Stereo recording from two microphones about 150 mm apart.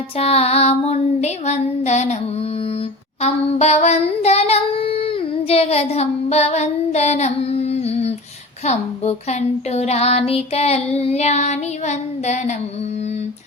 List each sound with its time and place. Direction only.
0.2 s speech: 40° left (ahead or behind)
3.2 s child singing: 45° left (ahead or behind)
8.6 s speech: 50° left (ahead or behind)